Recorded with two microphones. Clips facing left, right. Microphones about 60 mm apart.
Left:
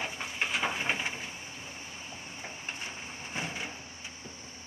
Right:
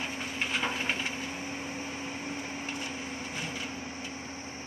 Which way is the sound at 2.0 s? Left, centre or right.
Right.